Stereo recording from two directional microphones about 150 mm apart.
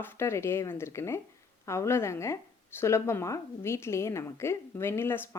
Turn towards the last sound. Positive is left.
turn(degrees=15)  # may be behind; listen again after turning